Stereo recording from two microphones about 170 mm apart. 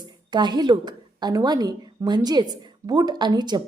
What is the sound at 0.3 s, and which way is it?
A woman's voice, 25° right (ahead or behind).